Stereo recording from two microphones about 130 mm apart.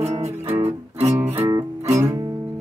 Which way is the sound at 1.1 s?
20° right (ahead or behind).